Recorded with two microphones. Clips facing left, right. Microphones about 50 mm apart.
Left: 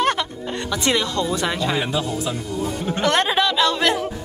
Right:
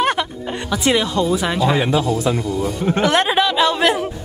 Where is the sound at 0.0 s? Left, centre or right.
Centre.